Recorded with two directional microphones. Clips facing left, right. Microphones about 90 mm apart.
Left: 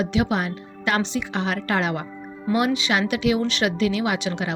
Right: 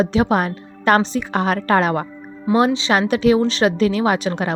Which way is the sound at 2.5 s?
30° right (ahead or behind).